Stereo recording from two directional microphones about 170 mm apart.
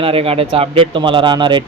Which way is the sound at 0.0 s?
35° right (ahead or behind).